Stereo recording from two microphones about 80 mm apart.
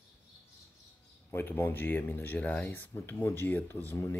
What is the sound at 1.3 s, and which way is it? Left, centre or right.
Speech, left.